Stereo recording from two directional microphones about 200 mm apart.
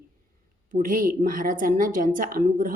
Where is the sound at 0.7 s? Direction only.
45° right (ahead or behind).